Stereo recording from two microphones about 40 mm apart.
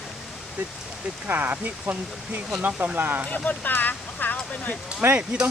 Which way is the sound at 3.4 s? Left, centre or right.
Left.